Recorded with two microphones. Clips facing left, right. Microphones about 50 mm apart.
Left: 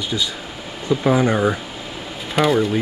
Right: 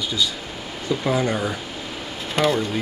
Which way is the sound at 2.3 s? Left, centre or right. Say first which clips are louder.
Left 4 dB; centre.